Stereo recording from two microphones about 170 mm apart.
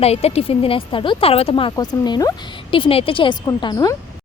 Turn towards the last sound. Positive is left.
turn(degrees=25)  # may be behind; listen again after turning